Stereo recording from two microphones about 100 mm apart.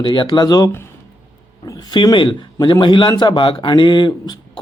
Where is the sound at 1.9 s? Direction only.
45° left (ahead or behind).